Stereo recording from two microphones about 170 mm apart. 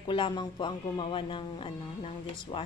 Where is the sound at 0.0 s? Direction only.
30° left (ahead or behind).